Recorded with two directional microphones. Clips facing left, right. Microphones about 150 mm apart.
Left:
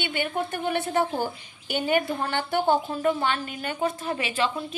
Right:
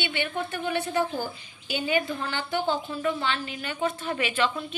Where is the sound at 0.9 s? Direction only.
55° left (ahead or behind); by 4.5 s 35° left (ahead or behind).